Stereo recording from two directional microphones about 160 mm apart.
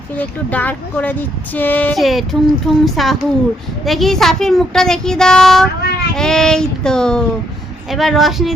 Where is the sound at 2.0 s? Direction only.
Centre (ahead or behind).